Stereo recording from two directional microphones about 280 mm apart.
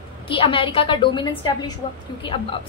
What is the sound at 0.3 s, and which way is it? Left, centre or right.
A woman's voice, centre.